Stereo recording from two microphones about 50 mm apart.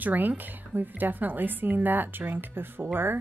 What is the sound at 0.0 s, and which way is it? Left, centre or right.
A woman's voice, right.